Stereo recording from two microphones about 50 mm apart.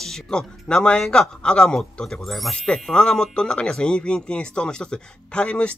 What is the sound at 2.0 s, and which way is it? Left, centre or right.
Speech, centre.